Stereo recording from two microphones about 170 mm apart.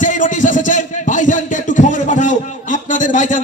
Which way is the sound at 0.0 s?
50° left (ahead or behind).